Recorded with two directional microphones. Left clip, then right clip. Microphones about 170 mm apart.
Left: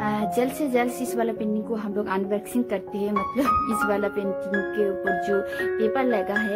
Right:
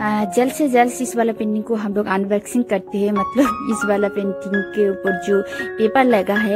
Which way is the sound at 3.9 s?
30° right (ahead or behind).